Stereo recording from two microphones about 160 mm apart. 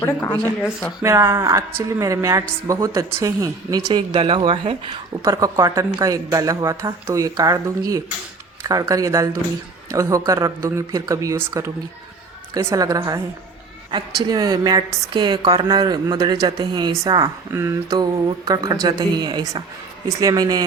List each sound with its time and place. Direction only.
0.0 s speech: 15° left (ahead or behind)
0.6 s speech: centre (ahead or behind)
1.0 s speech: 15° right (ahead or behind); by 4.9 s 35° right (ahead or behind)
5.2 s speech: 20° right (ahead or behind)
8.6 s speech: 20° right (ahead or behind)
14.3 s speech: 25° right (ahead or behind)